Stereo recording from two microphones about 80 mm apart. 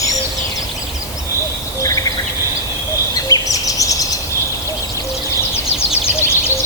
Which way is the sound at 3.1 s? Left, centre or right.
Left.